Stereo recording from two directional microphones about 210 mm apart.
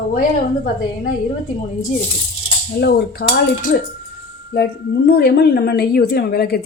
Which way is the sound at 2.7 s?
50° left (ahead or behind).